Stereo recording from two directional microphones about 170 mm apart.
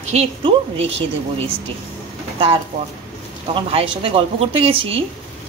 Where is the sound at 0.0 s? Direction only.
40° right (ahead or behind).